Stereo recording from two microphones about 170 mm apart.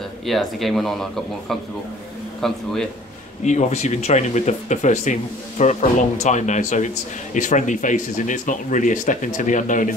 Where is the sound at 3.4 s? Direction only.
40° left (ahead or behind).